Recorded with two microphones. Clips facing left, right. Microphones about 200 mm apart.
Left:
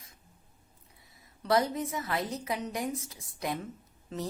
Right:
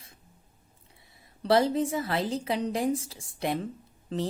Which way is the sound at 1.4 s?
30° right (ahead or behind).